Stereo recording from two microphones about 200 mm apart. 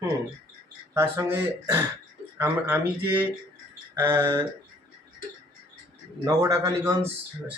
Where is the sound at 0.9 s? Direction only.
10° right (ahead or behind).